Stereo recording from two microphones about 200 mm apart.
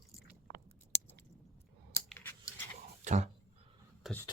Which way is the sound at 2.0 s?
10° left (ahead or behind).